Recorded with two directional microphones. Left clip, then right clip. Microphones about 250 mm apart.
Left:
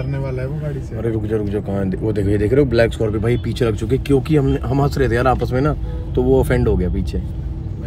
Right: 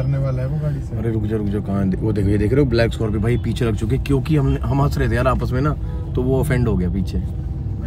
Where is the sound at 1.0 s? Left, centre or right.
Centre.